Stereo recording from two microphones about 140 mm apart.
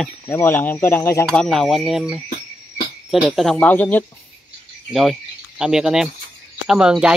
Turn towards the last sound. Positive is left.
turn(degrees=-5)  # may be behind; listen again after turning